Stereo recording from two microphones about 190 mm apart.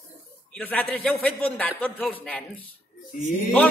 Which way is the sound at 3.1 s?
45° left (ahead or behind).